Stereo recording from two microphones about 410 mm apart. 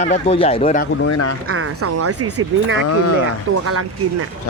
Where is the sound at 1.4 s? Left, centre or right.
Right.